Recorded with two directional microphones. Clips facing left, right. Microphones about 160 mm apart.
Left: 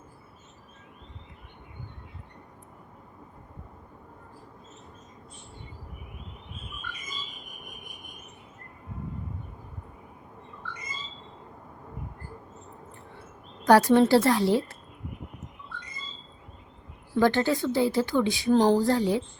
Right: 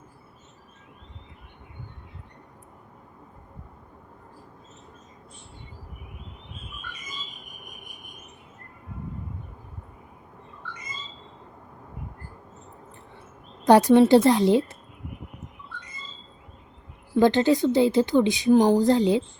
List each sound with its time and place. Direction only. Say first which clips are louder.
13.7 s a woman's voice: right 3 dB; 20° right (ahead or behind)
17.2 s a woman's voice: right 4 dB; 20° right (ahead or behind)